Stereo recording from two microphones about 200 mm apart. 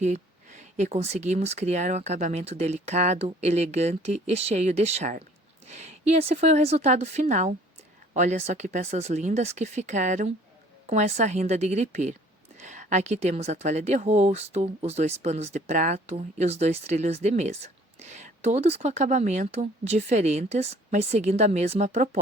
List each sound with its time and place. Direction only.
0.0 s speech: 35° right (ahead or behind)